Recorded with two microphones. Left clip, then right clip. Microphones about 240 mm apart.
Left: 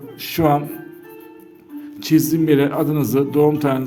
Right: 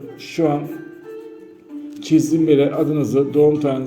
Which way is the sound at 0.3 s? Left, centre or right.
Left.